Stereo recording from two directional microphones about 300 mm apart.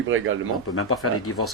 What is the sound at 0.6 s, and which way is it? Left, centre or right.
Speech, left.